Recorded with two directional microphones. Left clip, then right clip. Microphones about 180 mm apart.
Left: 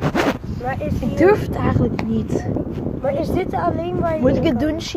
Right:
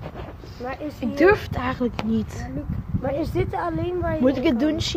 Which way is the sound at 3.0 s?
20° right (ahead or behind).